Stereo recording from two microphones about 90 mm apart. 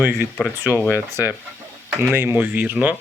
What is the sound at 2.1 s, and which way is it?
Speech, 25° right (ahead or behind).